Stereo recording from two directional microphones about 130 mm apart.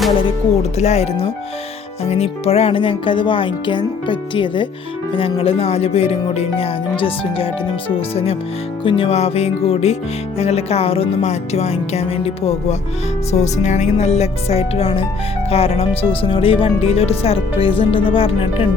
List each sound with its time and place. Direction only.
0.3 s speech: 55° left (ahead or behind); by 4.7 s 40° left (ahead or behind)
5.1 s music: 45° left (ahead or behind)
13.3 s speech: 60° left (ahead or behind)
15.4 s music: 50° left (ahead or behind)